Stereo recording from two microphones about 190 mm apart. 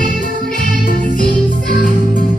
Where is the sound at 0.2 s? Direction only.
45° left (ahead or behind).